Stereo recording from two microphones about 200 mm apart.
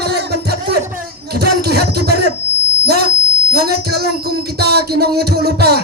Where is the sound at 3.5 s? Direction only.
55° right (ahead or behind).